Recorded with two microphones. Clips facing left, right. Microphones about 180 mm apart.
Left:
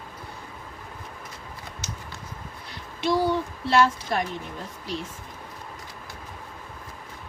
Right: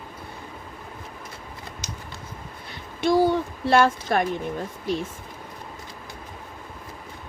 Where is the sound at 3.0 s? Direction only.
50° right (ahead or behind).